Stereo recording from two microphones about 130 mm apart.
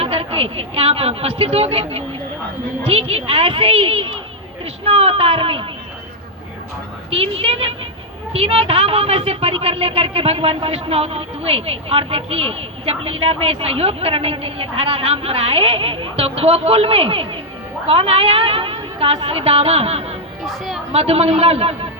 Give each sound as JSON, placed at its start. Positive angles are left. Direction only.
{"t": 0.0, "sound": "a woman's voice", "side_deg": -50}
{"t": 7.1, "sound": "speech", "side_deg": -45}
{"t": 20.4, "sound": "a woman's voice", "side_deg": 0}
{"t": 20.9, "sound": "speech", "side_deg": -50}